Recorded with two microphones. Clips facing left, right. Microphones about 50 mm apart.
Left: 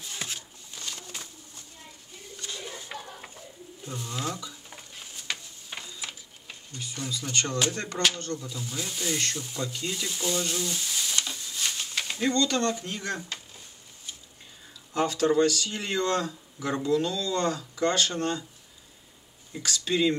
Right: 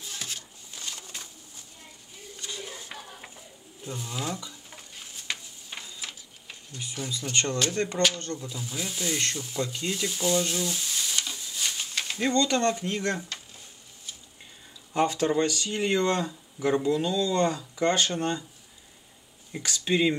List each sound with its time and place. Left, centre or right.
0.2 s a sound: centre
0.7 s pigeon: centre
2.3 s bird: centre
4.6 s a sound: centre
6.8 s speech: centre
8.4 s speech: centre
12.2 s speech: centre
13.0 s speech: centre
15.0 s speech: right
19.5 s speech: centre